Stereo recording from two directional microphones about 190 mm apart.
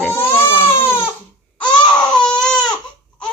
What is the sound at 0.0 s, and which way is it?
Baby cry, 10° left (ahead or behind).